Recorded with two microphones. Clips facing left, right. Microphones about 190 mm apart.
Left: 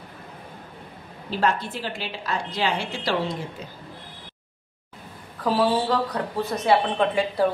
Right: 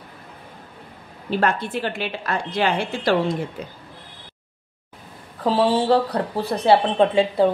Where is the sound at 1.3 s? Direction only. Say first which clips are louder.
Right 3 dB; 60° right (ahead or behind).